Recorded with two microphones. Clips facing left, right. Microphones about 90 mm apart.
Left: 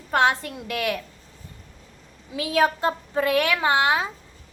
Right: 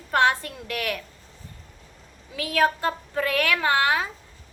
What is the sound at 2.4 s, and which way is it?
A child's voice, 20° left (ahead or behind).